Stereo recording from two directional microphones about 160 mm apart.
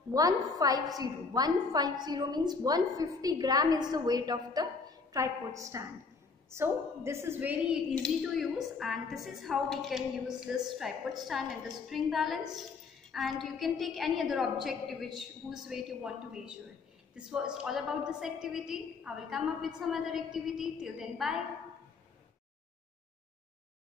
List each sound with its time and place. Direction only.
0.1 s a woman's voice: 20° right (ahead or behind)
7.9 s a woman's voice: 5° left (ahead or behind)